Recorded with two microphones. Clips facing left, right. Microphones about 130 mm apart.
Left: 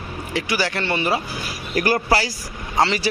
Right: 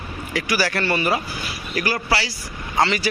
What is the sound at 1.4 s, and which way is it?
Speech, 45° left (ahead or behind).